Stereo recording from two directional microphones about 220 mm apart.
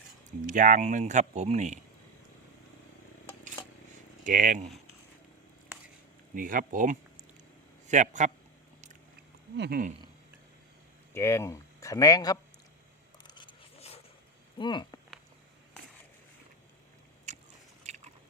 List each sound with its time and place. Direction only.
0.3 s speech: 35° right (ahead or behind)
4.2 s speech: 35° right (ahead or behind)
6.3 s speech: 40° right (ahead or behind)
9.6 s speech: 45° right (ahead or behind)
11.1 s speech: 10° left (ahead or behind)
13.2 s zipper: 20° left (ahead or behind)
14.6 s speech: 20° left (ahead or behind)
17.3 s biting: 30° right (ahead or behind)